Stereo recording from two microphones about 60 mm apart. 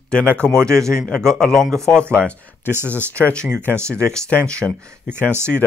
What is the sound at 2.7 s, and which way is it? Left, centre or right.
Speech, right.